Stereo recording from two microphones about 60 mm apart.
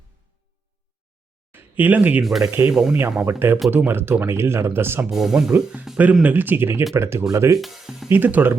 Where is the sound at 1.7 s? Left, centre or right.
Right.